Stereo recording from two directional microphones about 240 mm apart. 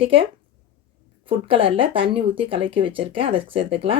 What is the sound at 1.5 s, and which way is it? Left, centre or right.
Speech, right.